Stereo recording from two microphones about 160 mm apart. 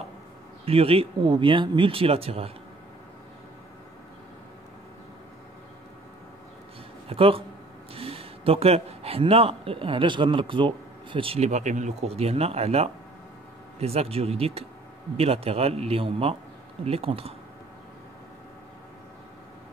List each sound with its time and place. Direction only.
0.7 s speech: 35° right (ahead or behind)
7.1 s speech: 35° right (ahead or behind)